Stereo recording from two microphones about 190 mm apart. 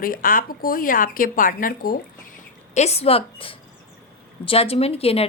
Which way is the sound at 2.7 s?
35° left (ahead or behind).